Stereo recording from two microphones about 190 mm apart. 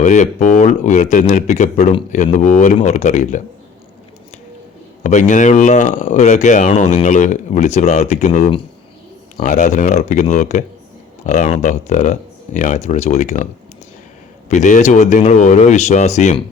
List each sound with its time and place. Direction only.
0.0 s speech: 40° left (ahead or behind)
5.0 s speech: 40° left (ahead or behind)
14.5 s speech: 40° left (ahead or behind)